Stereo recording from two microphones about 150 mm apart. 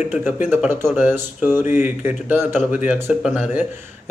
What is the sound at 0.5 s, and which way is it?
Speech, 15° right (ahead or behind).